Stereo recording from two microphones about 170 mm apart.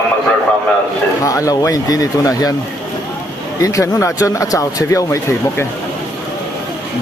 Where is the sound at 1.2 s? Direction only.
20° left (ahead or behind).